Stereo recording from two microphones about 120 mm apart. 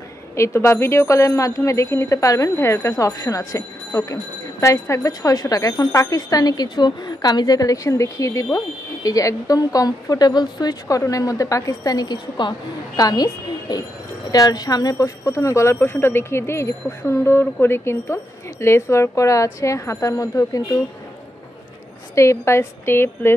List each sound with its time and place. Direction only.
0.4 s speech: 25° left (ahead or behind)
22.1 s speech: 25° left (ahead or behind)